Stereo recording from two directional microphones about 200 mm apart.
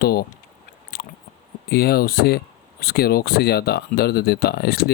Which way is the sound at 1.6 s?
50° left (ahead or behind).